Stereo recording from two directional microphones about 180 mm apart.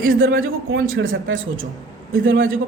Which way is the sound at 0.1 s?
90° right.